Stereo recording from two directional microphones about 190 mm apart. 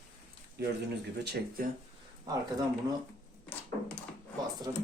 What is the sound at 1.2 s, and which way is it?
Speech, 55° right (ahead or behind).